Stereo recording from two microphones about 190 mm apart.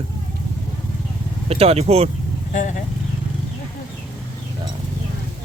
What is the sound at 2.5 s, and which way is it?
Speech, 40° left (ahead or behind).